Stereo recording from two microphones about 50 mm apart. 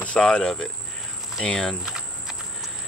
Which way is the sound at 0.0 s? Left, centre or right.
Left.